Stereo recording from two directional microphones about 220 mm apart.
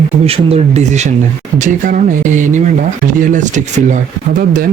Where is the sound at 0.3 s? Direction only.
25° right (ahead or behind).